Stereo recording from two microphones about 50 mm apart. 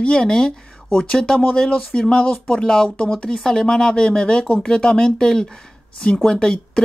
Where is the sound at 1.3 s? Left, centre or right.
Left.